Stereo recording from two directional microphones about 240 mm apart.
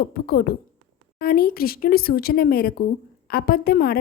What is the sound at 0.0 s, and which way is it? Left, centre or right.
A woman's voice, left.